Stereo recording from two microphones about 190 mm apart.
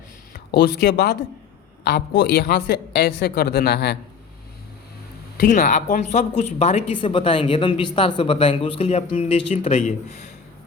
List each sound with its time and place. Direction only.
0.3 s a woman's voice: 60° left (ahead or behind)
5.5 s speech: 40° left (ahead or behind)